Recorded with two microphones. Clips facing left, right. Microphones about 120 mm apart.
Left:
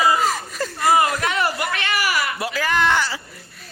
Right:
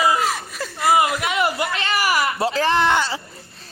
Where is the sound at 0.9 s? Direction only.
10° right (ahead or behind).